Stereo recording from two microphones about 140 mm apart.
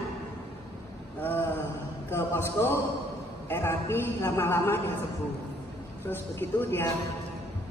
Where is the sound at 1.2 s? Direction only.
15° left (ahead or behind).